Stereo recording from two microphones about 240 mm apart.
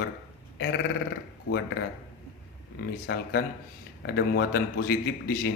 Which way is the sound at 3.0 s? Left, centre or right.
Left.